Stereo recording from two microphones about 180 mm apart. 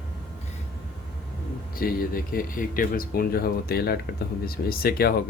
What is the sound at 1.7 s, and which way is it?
Speech, 55° left (ahead or behind).